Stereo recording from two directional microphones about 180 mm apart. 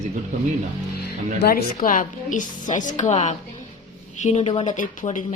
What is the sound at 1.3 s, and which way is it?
Speech, 55° left (ahead or behind).